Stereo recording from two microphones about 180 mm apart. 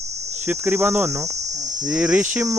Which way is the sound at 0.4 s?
10° right (ahead or behind).